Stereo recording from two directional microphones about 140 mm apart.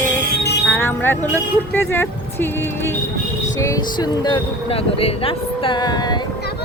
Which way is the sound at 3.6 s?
25° left (ahead or behind).